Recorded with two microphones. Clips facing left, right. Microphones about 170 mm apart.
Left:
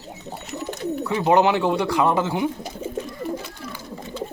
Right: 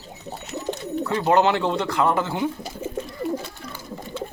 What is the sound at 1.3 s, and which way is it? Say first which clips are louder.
Speech: left 2 dB; 15° left (ahead or behind).